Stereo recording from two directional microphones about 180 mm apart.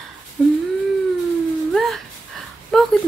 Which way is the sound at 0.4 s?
Centre (ahead or behind).